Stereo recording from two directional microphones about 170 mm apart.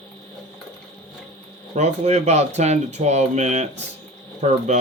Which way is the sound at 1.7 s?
40° right (ahead or behind).